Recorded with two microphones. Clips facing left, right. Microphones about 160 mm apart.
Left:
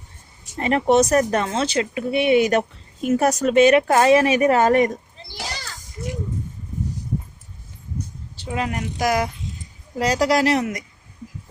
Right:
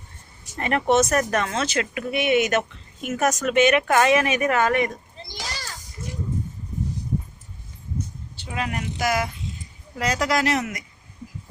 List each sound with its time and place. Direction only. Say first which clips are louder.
0.5 s speech: left 3 dB; 25° left (ahead or behind)
8.5 s speech: left 3 dB; 30° left (ahead or behind)